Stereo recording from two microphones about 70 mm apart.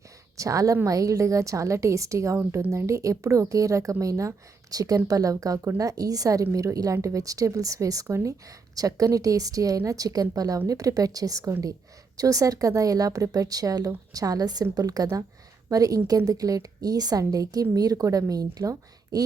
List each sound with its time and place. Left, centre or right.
0.3 s a woman's voice: right